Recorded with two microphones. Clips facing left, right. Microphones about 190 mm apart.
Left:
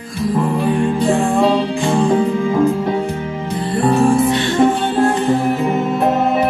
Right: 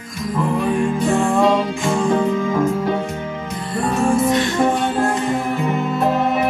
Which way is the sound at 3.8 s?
30° left (ahead or behind).